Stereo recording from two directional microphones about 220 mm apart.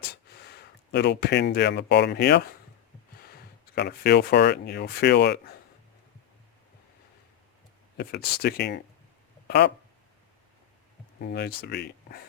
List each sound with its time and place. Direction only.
0.1 s speech: 45° left (ahead or behind)
7.9 s speech: 45° left (ahead or behind)
11.2 s speech: 45° left (ahead or behind)